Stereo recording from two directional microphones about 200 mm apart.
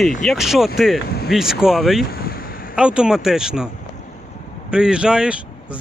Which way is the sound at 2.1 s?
50° left (ahead or behind).